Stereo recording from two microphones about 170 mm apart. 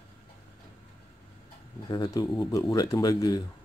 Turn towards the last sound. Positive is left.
turn(degrees=20)  # may be behind; listen again after turning